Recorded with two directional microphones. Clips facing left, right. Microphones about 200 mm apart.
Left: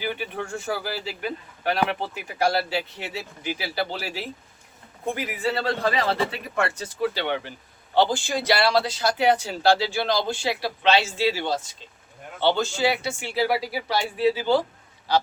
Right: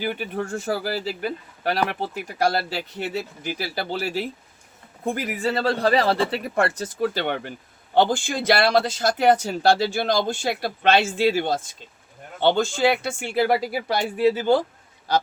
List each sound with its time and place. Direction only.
0.0 s speech: 45° right (ahead or behind)